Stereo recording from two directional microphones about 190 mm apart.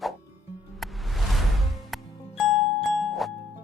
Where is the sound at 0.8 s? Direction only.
Centre (ahead or behind).